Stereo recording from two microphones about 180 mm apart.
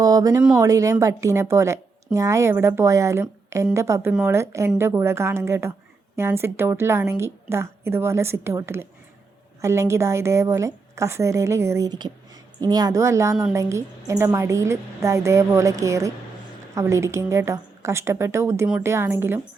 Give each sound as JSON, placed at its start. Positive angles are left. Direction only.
{"t": 0.0, "sound": "a woman's voice", "side_deg": -20}